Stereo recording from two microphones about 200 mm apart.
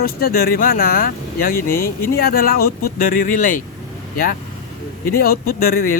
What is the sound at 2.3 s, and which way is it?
Speech, 50° left (ahead or behind).